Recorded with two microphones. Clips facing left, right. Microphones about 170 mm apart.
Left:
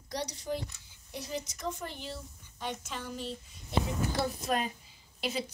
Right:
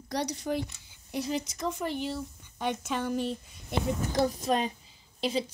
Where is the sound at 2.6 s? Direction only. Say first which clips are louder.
Right 8 dB; 60° right (ahead or behind).